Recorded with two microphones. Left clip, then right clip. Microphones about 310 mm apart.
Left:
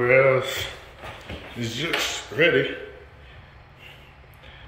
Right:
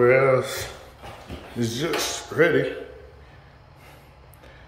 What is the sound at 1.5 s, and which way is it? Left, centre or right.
Speech, centre.